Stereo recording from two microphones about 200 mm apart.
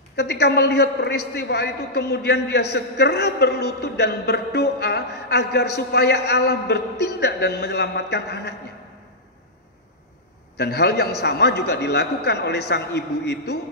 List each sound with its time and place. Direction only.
0.1 s a man's voice: 55° left (ahead or behind)
10.6 s a man's voice: 55° left (ahead or behind)